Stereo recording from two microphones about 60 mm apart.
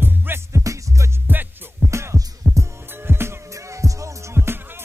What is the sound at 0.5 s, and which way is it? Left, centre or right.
Music, right.